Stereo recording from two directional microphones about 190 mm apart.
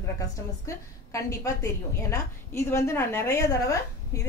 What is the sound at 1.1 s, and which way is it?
A woman's voice, 15° left (ahead or behind).